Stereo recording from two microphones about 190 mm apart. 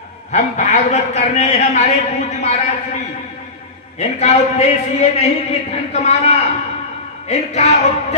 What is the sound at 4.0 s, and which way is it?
A man's voice, 35° left (ahead or behind).